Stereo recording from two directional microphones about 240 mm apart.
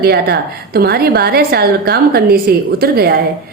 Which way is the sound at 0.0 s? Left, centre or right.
Right.